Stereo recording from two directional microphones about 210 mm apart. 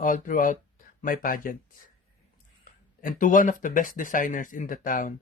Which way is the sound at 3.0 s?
40° left (ahead or behind).